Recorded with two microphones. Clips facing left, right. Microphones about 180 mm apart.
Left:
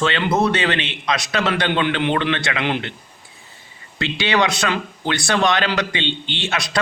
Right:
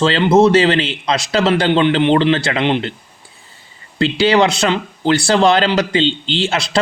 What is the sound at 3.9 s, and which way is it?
Speech, 30° right (ahead or behind).